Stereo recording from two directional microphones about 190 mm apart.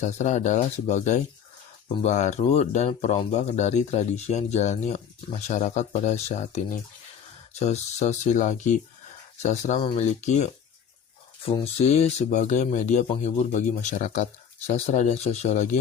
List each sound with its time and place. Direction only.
0.0 s speech: 40° left (ahead or behind)